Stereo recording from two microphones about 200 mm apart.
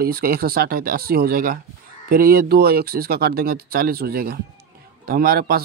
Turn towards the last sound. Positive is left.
turn(degrees=-50)  # may be behind; listen again after turning